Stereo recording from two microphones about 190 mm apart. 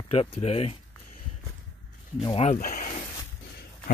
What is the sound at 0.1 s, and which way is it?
Speech, 30° left (ahead or behind).